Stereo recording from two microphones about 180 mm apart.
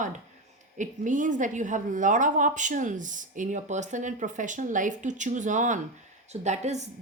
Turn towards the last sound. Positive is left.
turn(degrees=-40)  # may be behind; listen again after turning